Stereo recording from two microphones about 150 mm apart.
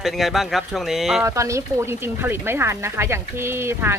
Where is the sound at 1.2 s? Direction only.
20° right (ahead or behind).